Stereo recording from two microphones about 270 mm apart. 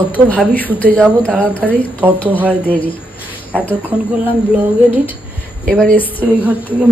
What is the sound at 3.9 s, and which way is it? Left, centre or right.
Speech, centre.